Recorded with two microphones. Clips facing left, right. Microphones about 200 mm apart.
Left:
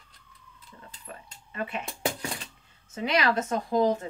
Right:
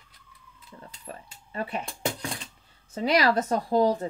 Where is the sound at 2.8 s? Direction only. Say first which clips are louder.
Right 3 dB; 35° right (ahead or behind).